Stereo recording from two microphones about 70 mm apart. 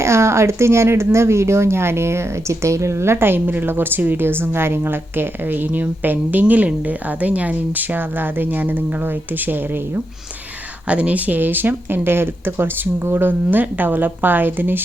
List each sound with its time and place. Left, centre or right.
0.0 s speech: right
10.8 s speech: centre